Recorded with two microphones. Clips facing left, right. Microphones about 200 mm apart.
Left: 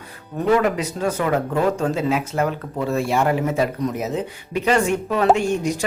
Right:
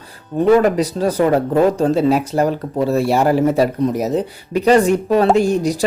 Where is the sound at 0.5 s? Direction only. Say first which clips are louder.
Right 5 dB; 35° right (ahead or behind).